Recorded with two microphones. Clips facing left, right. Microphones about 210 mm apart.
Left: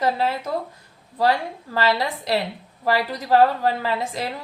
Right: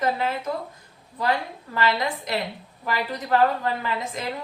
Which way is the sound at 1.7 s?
35° left (ahead or behind).